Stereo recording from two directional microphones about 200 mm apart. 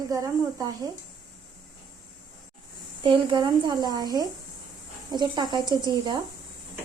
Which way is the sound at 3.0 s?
25° right (ahead or behind).